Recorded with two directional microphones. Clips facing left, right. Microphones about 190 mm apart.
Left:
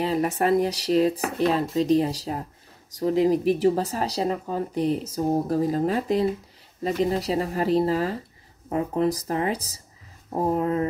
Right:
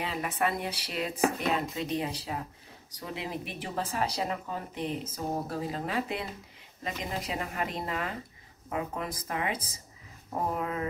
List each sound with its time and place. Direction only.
0.0 s speech: 40° left (ahead or behind)